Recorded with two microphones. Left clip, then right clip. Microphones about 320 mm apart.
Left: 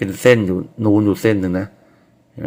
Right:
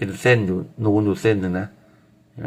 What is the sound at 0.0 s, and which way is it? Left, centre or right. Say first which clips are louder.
Speech: left 5 dB; centre.